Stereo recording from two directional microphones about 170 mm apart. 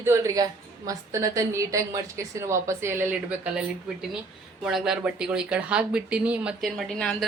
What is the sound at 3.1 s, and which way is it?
Speech, 5° right (ahead or behind).